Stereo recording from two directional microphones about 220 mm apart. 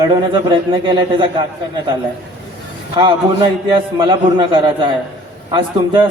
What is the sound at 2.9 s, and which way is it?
A man's voice, 20° right (ahead or behind).